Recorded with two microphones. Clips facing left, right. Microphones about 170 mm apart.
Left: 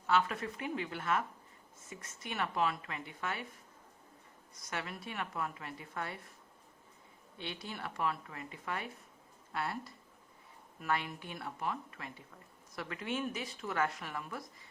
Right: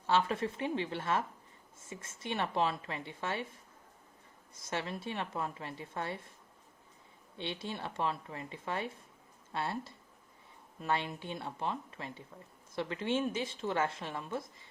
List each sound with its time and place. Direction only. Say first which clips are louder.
0.1 s speech: right 2 dB; 25° right (ahead or behind)
4.6 s speech: right 4 dB; 25° right (ahead or behind)
7.3 s speech: right 4 dB; 25° right (ahead or behind)